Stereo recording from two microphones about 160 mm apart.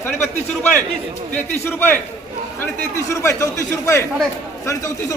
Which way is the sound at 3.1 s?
20° left (ahead or behind).